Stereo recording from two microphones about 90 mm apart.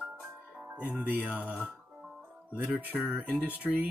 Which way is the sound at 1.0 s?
20° right (ahead or behind).